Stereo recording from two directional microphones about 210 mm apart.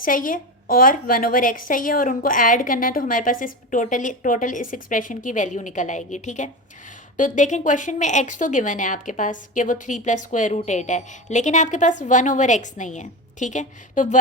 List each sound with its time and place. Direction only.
0.0 s a woman's voice: 40° left (ahead or behind)